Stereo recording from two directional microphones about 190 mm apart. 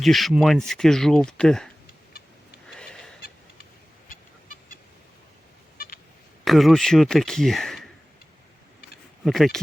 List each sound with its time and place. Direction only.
0.0 s speech: centre (ahead or behind)
2.7 s a sound: 5° left (ahead or behind)
3.2 s fowl: 55° left (ahead or behind)
4.1 s a sound: 45° left (ahead or behind)
5.7 s vehicle: 50° left (ahead or behind)
6.4 s speech: centre (ahead or behind)
9.2 s speech: centre (ahead or behind)